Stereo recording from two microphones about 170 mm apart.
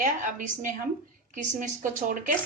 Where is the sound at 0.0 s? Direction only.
50° right (ahead or behind).